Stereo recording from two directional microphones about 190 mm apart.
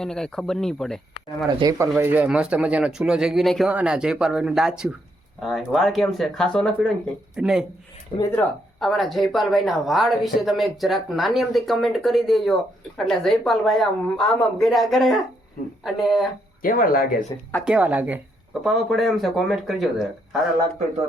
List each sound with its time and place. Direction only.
0.0 s a woman's voice: 5° left (ahead or behind)
1.5 s a woman's voice: 20° right (ahead or behind); by 7.6 s 5° right (ahead or behind)
8.2 s speech: 10° left (ahead or behind)
8.8 s a woman's voice: centre (ahead or behind)
16.6 s speech: 50° left (ahead or behind)
17.7 s a woman's voice: 5° right (ahead or behind)